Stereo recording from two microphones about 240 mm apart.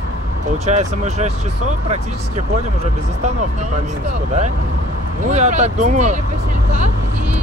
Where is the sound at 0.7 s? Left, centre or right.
Right.